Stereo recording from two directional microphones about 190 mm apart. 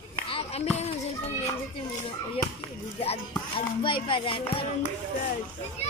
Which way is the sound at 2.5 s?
30° left (ahead or behind).